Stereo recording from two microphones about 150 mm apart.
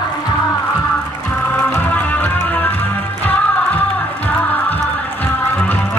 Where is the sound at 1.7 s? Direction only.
10° left (ahead or behind).